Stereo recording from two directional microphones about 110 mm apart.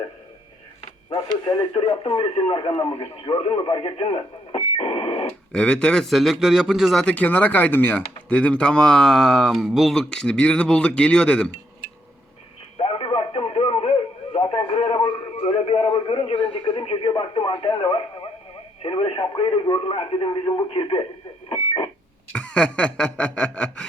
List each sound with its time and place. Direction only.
1.1 s speech: 40° left (ahead or behind); by 4.6 s 55° left (ahead or behind)
4.8 s radio: 55° left (ahead or behind)
5.5 s a man's voice: 10° left (ahead or behind)
7.0 s a man's voice: 15° left (ahead or behind)
12.8 s radio: 55° left (ahead or behind)
15.4 s speech: 55° left (ahead or behind)
22.3 s a man's voice: 10° left (ahead or behind)